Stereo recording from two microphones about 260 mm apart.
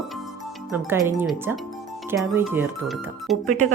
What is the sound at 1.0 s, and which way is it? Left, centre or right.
A woman's voice, centre.